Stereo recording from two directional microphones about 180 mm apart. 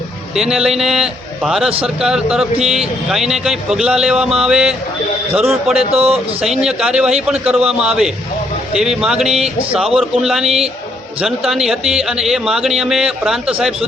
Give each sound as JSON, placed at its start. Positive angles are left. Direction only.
{"t": 0.3, "sound": "a man's voice", "side_deg": 0}
{"t": 5.9, "sound": "speech", "side_deg": -35}
{"t": 6.4, "sound": "a man's voice", "side_deg": -5}